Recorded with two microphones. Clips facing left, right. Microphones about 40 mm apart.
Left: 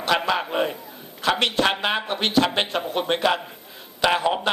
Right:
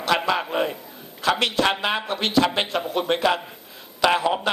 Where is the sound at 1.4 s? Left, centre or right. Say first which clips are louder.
Even; left.